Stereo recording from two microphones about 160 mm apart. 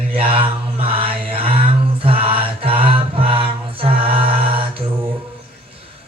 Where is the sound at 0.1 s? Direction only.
35° right (ahead or behind).